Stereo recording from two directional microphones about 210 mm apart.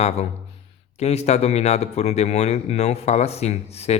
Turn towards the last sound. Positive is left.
turn(degrees=30)  # may be behind; listen again after turning